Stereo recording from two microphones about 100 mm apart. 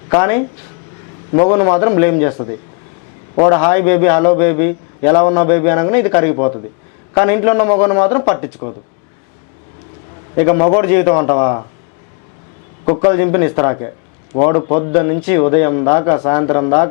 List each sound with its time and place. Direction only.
0.1 s a man's voice: 15° left (ahead or behind)
7.1 s a man's voice: 15° left (ahead or behind)
10.3 s a man's voice: 15° left (ahead or behind)
12.8 s a man's voice: 20° left (ahead or behind)